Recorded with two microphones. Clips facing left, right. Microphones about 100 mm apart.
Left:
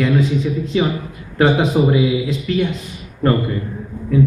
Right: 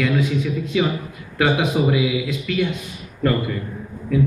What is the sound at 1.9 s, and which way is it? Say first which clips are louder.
Speech: left 4 dB; 35° left (ahead or behind).